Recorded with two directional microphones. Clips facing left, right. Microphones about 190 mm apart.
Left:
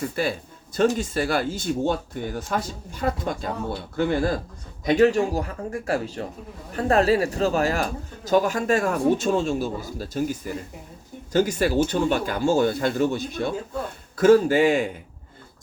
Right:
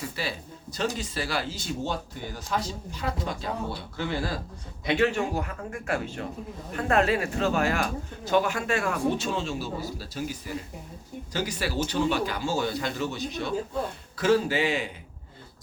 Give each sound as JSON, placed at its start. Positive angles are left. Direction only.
{"t": 0.0, "sound": "speech", "side_deg": 50}
{"t": 4.9, "sound": "speech", "side_deg": 40}